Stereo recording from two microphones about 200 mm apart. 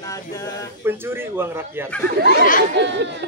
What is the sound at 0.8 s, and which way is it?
Speech, 10° right (ahead or behind).